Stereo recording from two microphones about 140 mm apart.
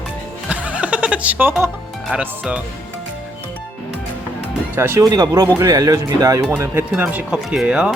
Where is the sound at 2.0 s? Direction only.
10° right (ahead or behind).